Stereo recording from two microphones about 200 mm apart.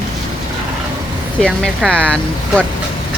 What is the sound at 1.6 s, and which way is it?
Speech, 5° left (ahead or behind).